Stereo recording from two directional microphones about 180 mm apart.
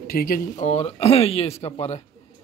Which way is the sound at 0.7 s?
35° left (ahead or behind).